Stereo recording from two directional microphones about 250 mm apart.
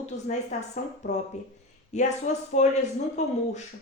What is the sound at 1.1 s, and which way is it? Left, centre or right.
A woman's voice, left.